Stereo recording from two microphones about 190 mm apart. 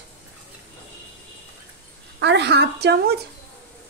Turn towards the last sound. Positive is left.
turn(degrees=-60)  # may be behind; listen again after turning